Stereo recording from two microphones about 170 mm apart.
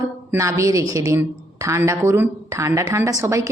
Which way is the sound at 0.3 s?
15° right (ahead or behind).